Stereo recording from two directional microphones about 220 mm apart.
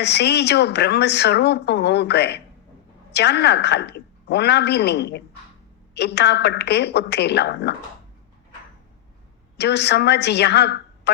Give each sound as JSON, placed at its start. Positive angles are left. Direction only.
{"t": 0.0, "sound": "speech", "side_deg": 50}
{"t": 9.6, "sound": "a woman's voice", "side_deg": 50}